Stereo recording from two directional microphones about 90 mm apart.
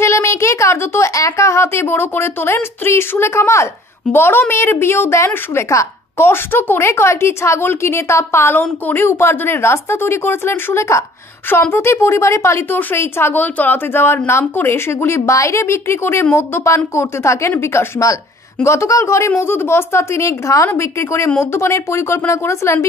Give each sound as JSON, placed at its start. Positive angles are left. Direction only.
{"t": 0.0, "sound": "a woman's voice", "side_deg": 30}